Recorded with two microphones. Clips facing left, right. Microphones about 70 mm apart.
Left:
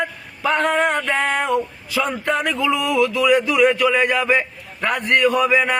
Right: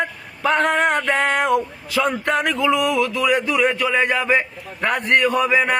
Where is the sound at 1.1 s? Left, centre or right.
Right.